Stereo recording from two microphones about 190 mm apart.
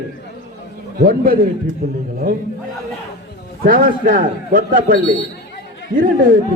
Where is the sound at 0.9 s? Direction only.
50° right (ahead or behind).